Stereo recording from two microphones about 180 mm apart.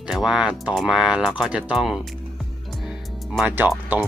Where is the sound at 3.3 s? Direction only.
10° right (ahead or behind).